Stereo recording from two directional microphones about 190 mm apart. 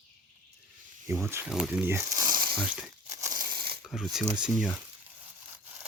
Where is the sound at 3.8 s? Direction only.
Centre (ahead or behind).